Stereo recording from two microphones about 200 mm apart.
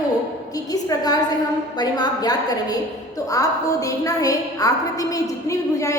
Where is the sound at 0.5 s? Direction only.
20° left (ahead or behind).